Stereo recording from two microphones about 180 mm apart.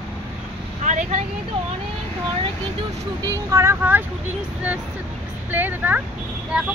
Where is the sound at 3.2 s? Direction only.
20° right (ahead or behind).